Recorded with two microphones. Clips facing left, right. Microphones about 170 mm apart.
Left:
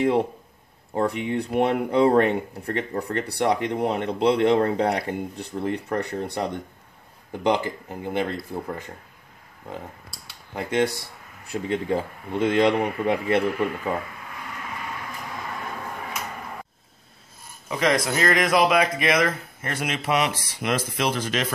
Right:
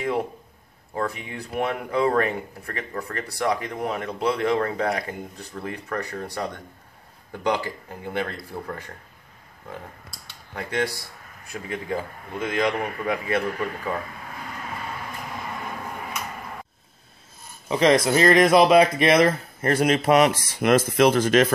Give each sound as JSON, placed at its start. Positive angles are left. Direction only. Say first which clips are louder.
{"t": 0.9, "sound": "speech", "louder": "left 5 dB", "side_deg": 30}
{"t": 10.5, "sound": "speech", "louder": "left 4 dB", "side_deg": 20}
{"t": 17.6, "sound": "speech", "louder": "right 4 dB", "side_deg": -25}